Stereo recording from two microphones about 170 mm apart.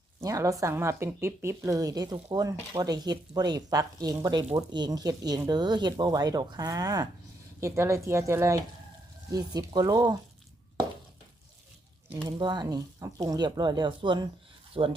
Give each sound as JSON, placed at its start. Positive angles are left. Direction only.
{"t": 0.2, "sound": "a woman's voice", "side_deg": -20}
{"t": 12.4, "sound": "a woman's voice", "side_deg": -25}
{"t": 14.8, "sound": "rub", "side_deg": -30}